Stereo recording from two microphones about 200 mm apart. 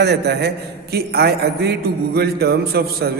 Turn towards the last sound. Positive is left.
turn(degrees=-50)  # may be behind; listen again after turning